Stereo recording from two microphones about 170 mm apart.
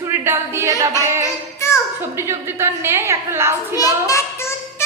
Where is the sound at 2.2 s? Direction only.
15° right (ahead or behind).